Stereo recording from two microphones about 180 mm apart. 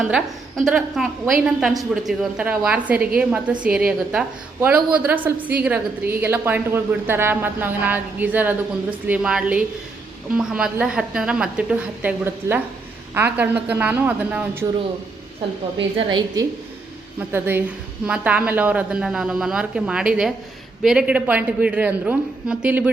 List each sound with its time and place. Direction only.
0.0 s a woman's voice: centre (ahead or behind)
15.8 s a woman's voice: 25° right (ahead or behind)
17.2 s a woman's voice: 10° right (ahead or behind)